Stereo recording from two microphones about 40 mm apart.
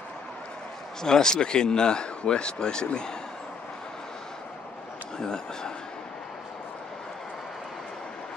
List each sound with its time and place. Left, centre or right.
1.0 s speech: centre
5.1 s speech: centre